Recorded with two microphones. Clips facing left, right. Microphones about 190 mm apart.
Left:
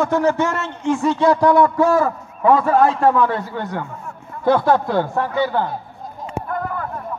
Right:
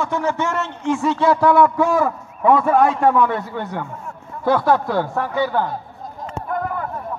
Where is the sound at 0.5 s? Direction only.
Centre (ahead or behind).